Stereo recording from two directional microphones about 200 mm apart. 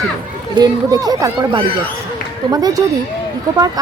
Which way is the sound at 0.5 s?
20° right (ahead or behind).